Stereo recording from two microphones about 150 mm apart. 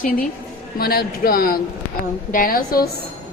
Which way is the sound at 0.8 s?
90° left.